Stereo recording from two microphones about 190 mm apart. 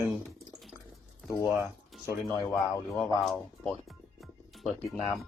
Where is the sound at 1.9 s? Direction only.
Centre (ahead or behind).